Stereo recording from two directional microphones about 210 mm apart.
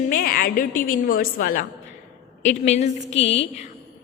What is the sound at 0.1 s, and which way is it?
A woman's voice, 45° left (ahead or behind).